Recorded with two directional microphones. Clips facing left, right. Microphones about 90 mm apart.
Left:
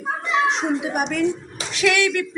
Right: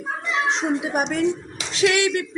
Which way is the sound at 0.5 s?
30° right (ahead or behind).